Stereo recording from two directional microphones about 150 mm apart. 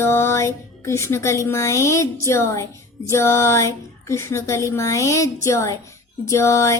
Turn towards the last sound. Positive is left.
turn(degrees=20)  # may be behind; listen again after turning